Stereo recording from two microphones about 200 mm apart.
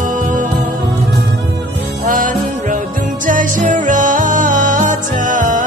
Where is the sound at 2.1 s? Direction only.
40° right (ahead or behind).